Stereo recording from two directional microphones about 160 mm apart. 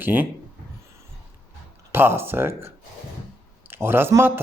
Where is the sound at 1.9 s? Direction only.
15° right (ahead or behind).